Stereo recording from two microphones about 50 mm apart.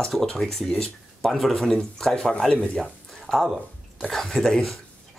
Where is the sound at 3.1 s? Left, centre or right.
Centre.